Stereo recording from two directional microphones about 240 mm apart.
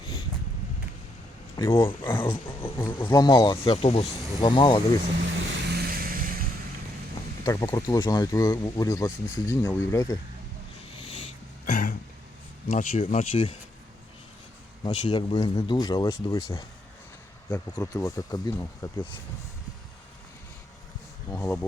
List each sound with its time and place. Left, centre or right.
1.5 s speech: centre
5.2 s vehicle: right
7.4 s speech: centre
11.6 s throat clearing: left
12.6 s speech: left
14.8 s speech: centre
17.7 s speech: centre
21.2 s speech: centre